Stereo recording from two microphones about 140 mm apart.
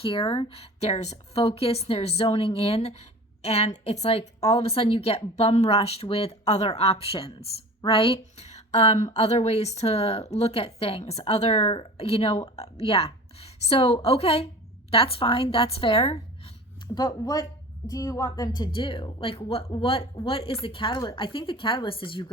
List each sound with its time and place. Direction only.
0.0 s a woman's voice: 40° left (ahead or behind)
16.9 s a woman's voice: 30° left (ahead or behind)